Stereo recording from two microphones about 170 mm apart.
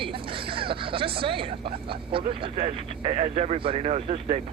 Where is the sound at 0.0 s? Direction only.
30° right (ahead or behind).